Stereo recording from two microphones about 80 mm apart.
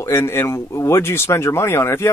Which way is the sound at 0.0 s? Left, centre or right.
Left.